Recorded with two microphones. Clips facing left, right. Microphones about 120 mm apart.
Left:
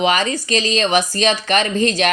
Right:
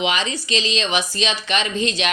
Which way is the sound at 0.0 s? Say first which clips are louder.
Left 5 dB; 45° left (ahead or behind).